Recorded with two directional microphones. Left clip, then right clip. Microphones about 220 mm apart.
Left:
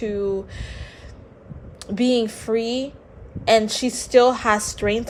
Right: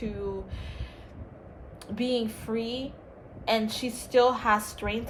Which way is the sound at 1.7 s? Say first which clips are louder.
Left 9 dB; 45° left (ahead or behind).